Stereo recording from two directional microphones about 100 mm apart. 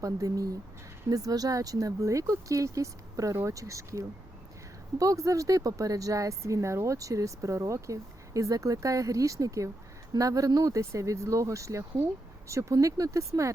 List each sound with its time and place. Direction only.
0.0 s speech: 35° right (ahead or behind)